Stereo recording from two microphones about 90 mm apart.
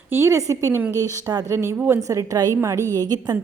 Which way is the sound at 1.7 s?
20° right (ahead or behind).